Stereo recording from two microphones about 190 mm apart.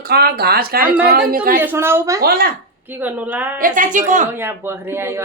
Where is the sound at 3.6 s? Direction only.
45° right (ahead or behind).